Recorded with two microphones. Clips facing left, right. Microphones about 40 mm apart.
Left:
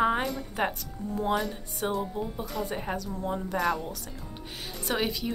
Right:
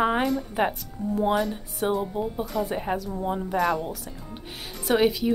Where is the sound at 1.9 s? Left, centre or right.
Centre.